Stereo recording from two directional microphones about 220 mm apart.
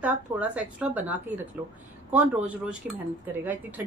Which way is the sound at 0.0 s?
5° right (ahead or behind).